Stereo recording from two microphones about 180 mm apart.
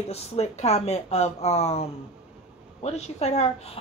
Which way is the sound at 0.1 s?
35° left (ahead or behind).